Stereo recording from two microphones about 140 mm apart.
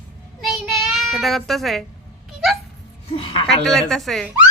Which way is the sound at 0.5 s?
Centre (ahead or behind).